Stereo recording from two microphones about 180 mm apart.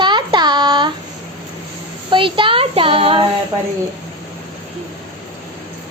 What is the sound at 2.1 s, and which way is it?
Child singing, 30° right (ahead or behind).